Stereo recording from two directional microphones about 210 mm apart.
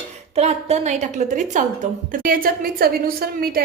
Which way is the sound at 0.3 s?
30° right (ahead or behind).